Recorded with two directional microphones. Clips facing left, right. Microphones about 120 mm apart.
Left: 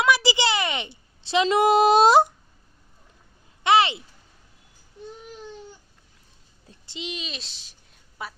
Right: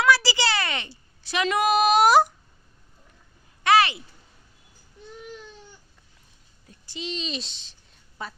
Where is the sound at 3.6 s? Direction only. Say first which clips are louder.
Even; 20° left (ahead or behind).